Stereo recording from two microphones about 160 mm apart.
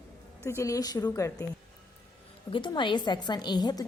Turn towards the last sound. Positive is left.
turn(degrees=25)  # may be behind; listen again after turning